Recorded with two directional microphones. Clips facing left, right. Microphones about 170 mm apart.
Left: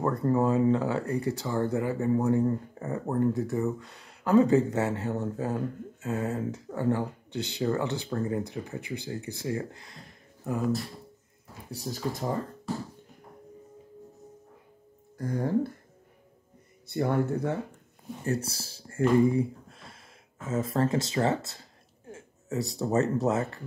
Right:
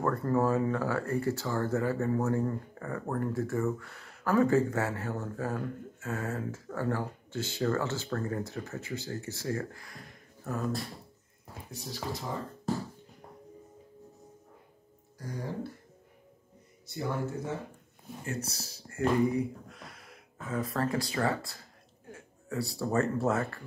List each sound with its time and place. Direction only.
0.0 s speech: 20° left (ahead or behind)
11.7 s speech: 45° left (ahead or behind)
15.1 s speech: 55° left (ahead or behind)
16.8 s speech: 60° left (ahead or behind)
18.2 s speech: 35° left (ahead or behind)